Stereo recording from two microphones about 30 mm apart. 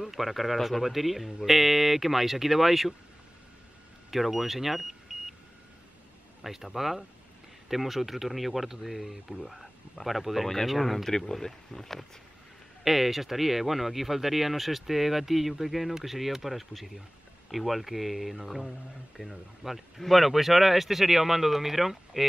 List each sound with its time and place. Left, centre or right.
0.0 s speech: centre
4.1 s speech: centre
6.4 s speech: centre
11.1 s speech: centre
12.8 s speech: centre